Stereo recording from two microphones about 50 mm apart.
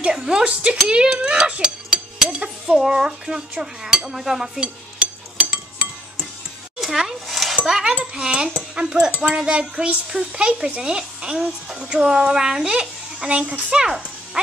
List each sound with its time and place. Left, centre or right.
0.1 s speech: centre
0.8 s dishes: centre
2.6 s speech: centre
4.6 s dishes: right
6.8 s a sound: centre
7.8 s speech: centre